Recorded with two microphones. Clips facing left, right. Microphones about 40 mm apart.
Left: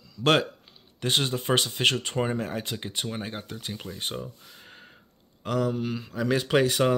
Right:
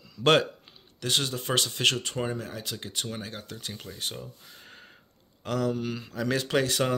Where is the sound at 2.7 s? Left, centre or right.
Left.